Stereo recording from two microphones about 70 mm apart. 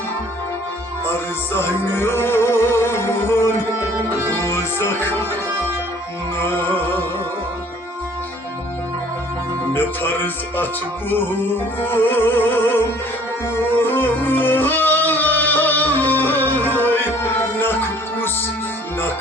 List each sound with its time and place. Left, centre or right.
1.5 s music: left
6.4 s music: left
9.7 s music: left
11.9 s music: left